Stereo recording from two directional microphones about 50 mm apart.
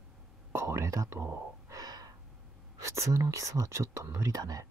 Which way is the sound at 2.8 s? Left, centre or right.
Right.